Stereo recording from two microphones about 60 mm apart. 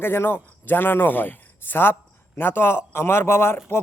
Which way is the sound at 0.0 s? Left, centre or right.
Left.